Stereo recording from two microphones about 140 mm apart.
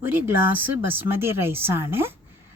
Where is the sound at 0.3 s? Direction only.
15° right (ahead or behind).